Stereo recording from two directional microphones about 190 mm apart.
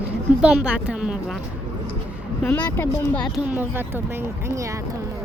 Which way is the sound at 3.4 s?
10° right (ahead or behind).